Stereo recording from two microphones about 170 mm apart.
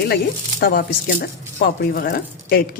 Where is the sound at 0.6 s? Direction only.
60° left (ahead or behind).